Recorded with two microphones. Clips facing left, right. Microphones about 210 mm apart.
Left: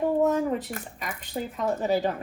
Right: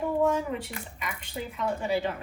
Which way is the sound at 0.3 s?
45° left (ahead or behind).